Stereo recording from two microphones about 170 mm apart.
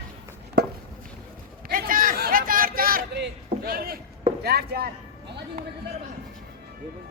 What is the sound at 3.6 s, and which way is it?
A man's voice, 60° right (ahead or behind).